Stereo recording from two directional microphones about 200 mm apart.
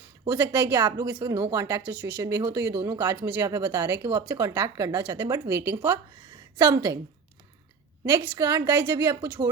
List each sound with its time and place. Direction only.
0.3 s a woman's voice: 15° right (ahead or behind)
8.2 s speech: 15° right (ahead or behind)